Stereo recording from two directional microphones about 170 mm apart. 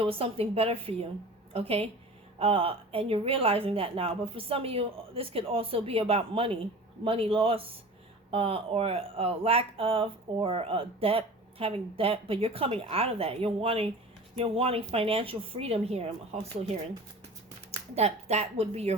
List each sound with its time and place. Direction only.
0.0 s a woman's voice: 35° right (ahead or behind)